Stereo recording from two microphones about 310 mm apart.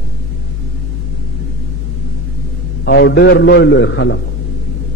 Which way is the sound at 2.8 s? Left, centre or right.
Left.